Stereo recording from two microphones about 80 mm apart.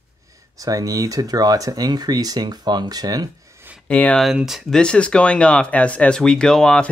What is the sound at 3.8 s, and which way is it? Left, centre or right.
Speech, centre.